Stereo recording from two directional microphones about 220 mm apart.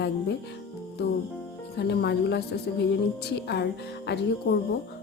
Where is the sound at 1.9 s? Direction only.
50° left (ahead or behind).